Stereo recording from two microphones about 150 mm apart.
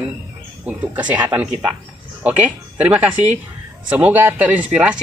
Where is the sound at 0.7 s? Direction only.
10° right (ahead or behind).